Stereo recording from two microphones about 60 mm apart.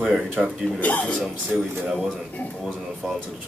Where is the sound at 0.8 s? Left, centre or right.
Centre.